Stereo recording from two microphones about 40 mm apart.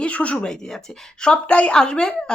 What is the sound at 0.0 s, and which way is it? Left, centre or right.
Speech, left.